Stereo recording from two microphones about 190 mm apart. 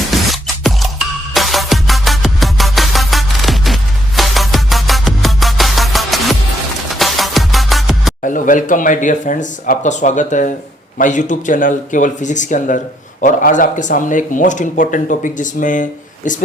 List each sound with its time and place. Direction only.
0.1 s music: centre (ahead or behind)
8.2 s speech: 45° left (ahead or behind)